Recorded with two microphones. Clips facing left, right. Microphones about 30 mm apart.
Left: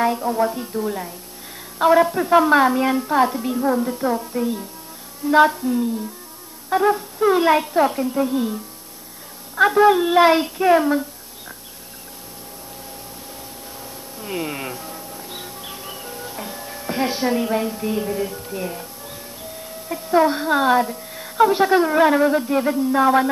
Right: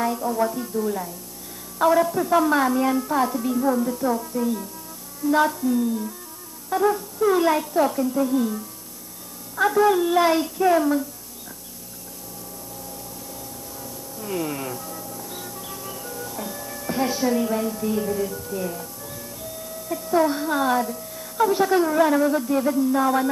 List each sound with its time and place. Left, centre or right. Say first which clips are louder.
0.0 s a woman's voice: left 3 dB; left
9.6 s a child's voice: left 4 dB; left
13.4 s a sound: left 1 dB; left
19.9 s a woman's voice: left 3 dB; left